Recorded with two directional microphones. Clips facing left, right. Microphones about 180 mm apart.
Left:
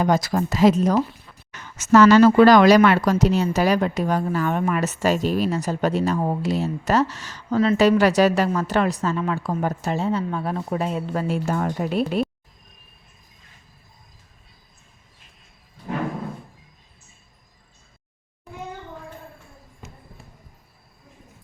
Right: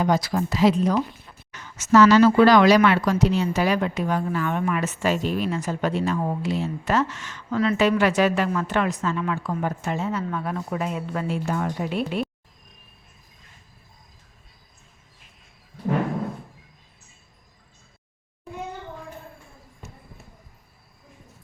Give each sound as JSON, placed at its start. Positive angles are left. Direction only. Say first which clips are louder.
{"t": 0.0, "sound": "speech", "louder": "left 2 dB", "side_deg": 45}